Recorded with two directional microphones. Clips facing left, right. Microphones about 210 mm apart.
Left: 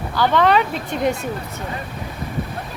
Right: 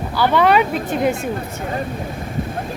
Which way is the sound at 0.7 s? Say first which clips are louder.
Right 4 dB; 45° right (ahead or behind).